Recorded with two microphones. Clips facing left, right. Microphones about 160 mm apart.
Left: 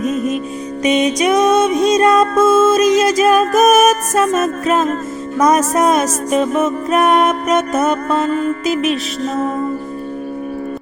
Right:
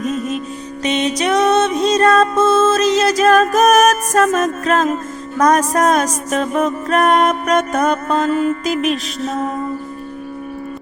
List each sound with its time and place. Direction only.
0.0 s music: 50° left (ahead or behind)
0.8 s music: 10° left (ahead or behind)
8.7 s music: 40° right (ahead or behind)